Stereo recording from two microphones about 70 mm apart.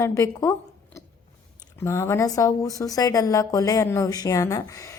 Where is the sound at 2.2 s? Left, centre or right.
Left.